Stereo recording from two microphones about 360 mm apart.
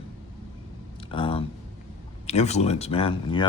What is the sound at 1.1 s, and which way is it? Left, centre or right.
Speech, centre.